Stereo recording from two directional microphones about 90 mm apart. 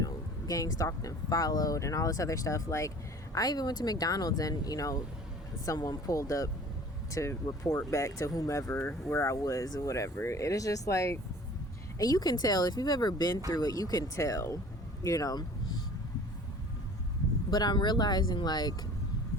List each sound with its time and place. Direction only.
0.0 s speech: 40° left (ahead or behind)
3.3 s speech: 45° left (ahead or behind)
17.5 s speech: 50° left (ahead or behind)